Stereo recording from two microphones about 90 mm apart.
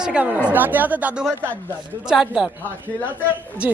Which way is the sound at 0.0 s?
10° right (ahead or behind).